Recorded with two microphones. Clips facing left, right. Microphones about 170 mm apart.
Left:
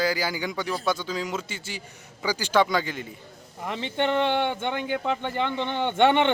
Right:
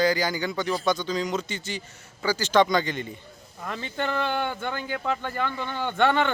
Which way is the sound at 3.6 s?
20° left (ahead or behind).